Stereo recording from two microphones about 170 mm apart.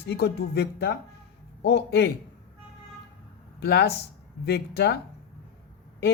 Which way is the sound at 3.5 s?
75° left (ahead or behind).